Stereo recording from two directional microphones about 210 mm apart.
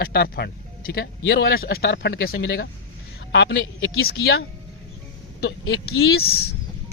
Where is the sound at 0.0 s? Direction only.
50° left (ahead or behind).